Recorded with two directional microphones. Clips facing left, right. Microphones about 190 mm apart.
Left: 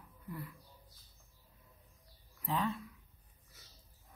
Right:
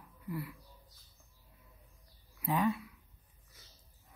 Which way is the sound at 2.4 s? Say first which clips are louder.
Right 4 dB; 10° right (ahead or behind).